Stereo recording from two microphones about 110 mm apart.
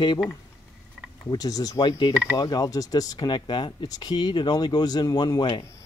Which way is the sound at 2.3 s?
35° left (ahead or behind).